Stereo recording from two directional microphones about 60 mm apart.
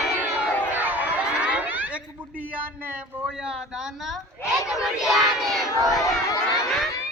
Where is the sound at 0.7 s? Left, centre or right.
Right.